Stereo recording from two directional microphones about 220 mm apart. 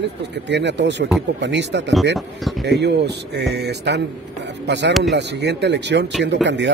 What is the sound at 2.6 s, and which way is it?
Speech, 50° right (ahead or behind).